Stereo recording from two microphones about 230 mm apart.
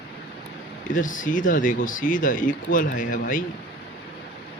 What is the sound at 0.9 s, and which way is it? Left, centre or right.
Speech, left.